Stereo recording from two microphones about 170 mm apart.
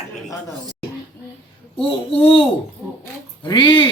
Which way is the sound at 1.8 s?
30° left (ahead or behind).